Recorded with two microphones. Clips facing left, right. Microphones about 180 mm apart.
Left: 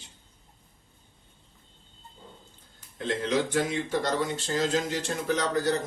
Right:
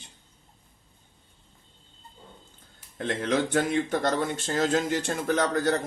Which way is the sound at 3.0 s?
55° right (ahead or behind).